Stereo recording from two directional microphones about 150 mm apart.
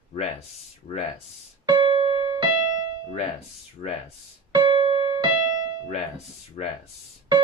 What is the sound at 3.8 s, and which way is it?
Speech, 55° left (ahead or behind).